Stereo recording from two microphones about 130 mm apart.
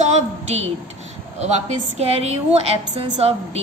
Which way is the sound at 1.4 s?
60° right (ahead or behind).